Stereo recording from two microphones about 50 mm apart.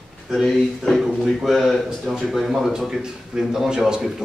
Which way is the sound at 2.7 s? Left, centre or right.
Centre.